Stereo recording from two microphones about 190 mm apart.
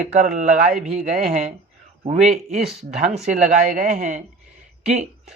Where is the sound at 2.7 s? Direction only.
35° right (ahead or behind).